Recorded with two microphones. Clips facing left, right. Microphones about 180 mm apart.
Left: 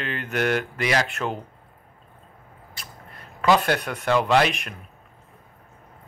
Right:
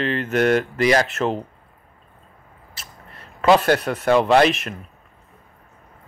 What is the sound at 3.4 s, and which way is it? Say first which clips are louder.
Speech: right 4 dB; 40° right (ahead or behind).